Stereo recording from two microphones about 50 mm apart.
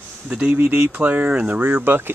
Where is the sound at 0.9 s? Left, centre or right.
Right.